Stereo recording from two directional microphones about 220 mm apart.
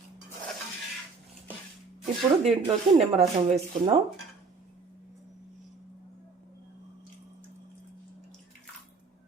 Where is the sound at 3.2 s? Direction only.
30° right (ahead or behind).